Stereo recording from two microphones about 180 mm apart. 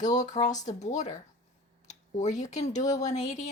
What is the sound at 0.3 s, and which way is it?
Speech, 40° left (ahead or behind).